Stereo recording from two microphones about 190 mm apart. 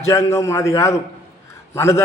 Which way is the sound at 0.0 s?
15° left (ahead or behind).